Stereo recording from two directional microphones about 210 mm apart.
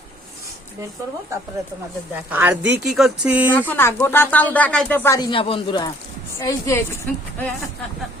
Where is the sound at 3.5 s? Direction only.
10° left (ahead or behind).